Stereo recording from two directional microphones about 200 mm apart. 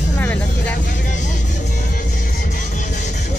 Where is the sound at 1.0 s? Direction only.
40° left (ahead or behind).